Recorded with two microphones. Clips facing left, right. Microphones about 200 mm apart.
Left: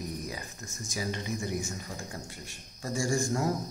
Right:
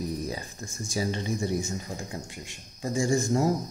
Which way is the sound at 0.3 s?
30° right (ahead or behind).